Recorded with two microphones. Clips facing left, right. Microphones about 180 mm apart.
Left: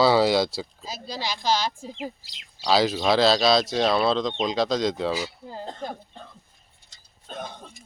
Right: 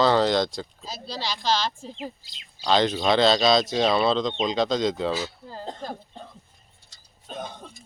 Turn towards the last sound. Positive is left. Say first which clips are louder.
# right 1 dB
turn(degrees=0)  # may be behind; listen again after turning